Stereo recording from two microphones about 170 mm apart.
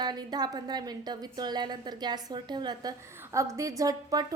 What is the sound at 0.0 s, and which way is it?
A woman's voice, 25° right (ahead or behind).